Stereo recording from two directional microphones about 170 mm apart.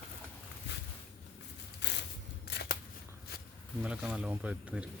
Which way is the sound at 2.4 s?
75° left (ahead or behind).